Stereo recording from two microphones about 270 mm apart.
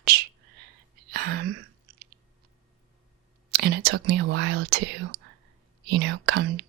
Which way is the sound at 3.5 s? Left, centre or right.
Right.